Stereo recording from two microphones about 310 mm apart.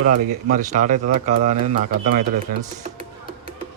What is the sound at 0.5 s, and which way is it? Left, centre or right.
Speech, right.